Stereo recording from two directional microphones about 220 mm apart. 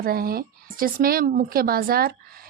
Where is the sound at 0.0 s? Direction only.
40° right (ahead or behind).